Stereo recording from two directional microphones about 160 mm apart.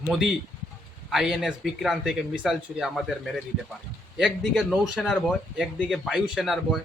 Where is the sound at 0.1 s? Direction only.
Centre (ahead or behind).